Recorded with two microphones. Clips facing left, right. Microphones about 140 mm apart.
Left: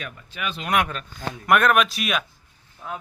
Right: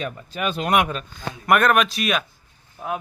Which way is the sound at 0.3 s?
40° right (ahead or behind).